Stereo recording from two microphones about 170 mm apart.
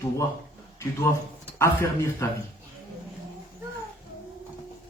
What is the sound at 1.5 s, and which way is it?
Speech, 15° left (ahead or behind).